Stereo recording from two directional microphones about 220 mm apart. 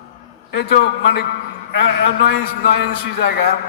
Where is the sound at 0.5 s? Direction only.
55° left (ahead or behind).